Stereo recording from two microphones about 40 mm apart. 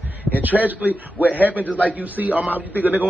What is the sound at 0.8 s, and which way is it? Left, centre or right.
A man's voice, right.